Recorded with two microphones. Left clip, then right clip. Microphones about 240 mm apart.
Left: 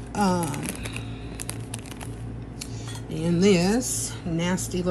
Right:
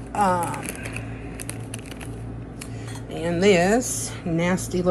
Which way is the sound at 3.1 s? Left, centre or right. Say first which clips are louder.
Right 3 dB; left.